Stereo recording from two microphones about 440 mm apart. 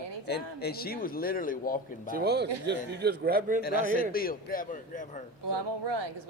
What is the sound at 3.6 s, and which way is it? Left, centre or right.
Speech, centre.